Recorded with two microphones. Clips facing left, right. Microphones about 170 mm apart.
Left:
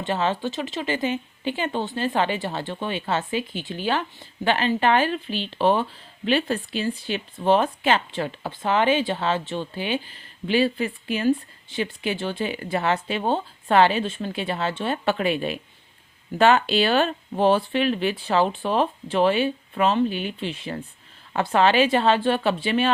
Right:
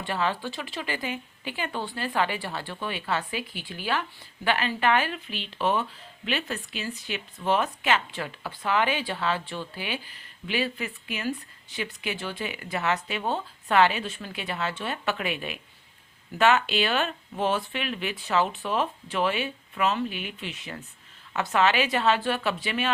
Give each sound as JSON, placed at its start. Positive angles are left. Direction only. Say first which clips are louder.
{"t": 0.0, "sound": "speech", "louder": "left 4 dB", "side_deg": 25}